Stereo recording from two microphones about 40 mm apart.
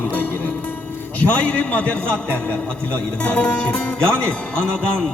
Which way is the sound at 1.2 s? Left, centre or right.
Left.